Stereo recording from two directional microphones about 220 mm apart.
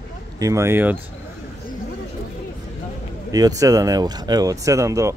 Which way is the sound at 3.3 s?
15° right (ahead or behind).